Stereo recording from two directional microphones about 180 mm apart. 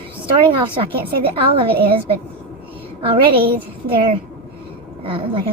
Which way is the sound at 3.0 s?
30° right (ahead or behind).